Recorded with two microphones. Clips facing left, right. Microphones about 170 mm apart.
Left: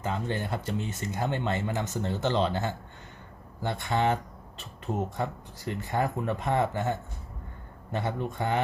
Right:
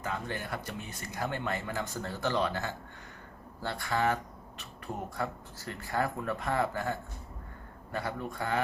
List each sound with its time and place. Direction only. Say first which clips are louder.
0.0 s speech: left 5 dB; 25° left (ahead or behind)